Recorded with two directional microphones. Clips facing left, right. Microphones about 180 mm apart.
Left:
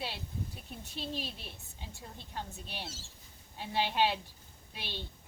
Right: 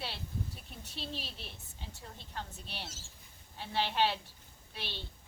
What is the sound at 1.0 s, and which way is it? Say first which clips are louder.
Speech: left 4 dB; 45° left (ahead or behind).